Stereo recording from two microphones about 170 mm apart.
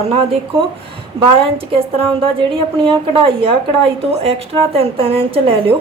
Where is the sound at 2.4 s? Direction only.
30° right (ahead or behind).